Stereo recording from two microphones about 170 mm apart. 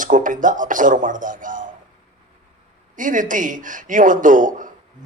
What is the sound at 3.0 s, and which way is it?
A man's voice, 50° right (ahead or behind).